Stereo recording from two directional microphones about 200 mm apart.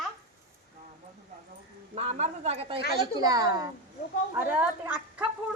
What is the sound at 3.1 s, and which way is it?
Speech, 20° right (ahead or behind).